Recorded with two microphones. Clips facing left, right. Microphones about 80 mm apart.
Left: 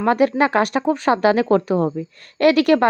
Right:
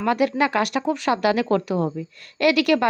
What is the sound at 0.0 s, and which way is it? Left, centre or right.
Speech, left.